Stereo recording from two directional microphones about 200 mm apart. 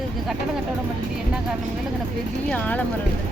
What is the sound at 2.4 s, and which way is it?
Speech, 5° left (ahead or behind).